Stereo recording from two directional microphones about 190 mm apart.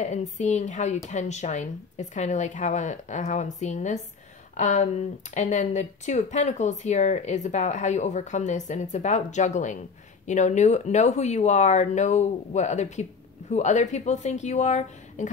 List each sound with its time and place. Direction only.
0.0 s speech: 40° left (ahead or behind)